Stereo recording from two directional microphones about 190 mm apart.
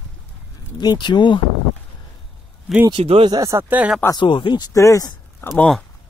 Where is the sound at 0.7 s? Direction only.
25° left (ahead or behind).